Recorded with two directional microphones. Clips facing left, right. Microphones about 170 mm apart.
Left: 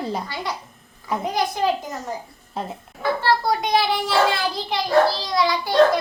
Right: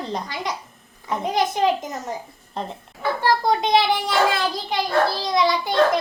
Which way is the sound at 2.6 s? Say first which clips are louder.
Even; 5° left (ahead or behind).